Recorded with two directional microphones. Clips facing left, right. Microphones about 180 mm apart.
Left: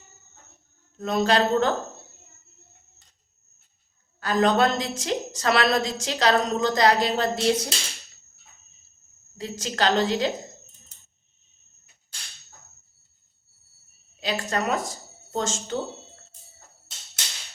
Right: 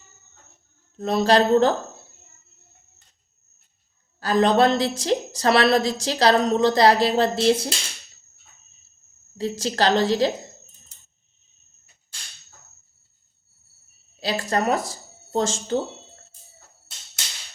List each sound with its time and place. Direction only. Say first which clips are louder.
0.9 s a woman's voice: right 3 dB; 30° right (ahead or behind)
4.2 s a woman's voice: right 3 dB; 30° right (ahead or behind)
9.4 s a woman's voice: right 4 dB; 35° right (ahead or behind)
14.2 s speech: right 3 dB; 35° right (ahead or behind)